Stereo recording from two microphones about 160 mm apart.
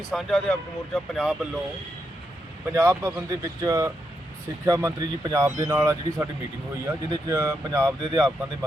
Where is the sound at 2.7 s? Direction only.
15° right (ahead or behind).